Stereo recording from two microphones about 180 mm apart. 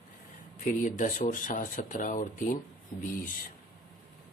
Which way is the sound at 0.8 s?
45° left (ahead or behind).